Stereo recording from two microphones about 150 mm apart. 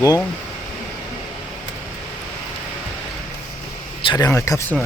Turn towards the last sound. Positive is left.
turn(degrees=20)  # may be behind; listen again after turning